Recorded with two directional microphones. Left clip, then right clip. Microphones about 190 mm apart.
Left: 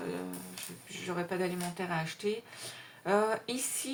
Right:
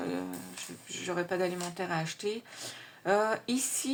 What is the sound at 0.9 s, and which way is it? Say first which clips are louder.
Speech: right 3 dB; 40° right (ahead or behind).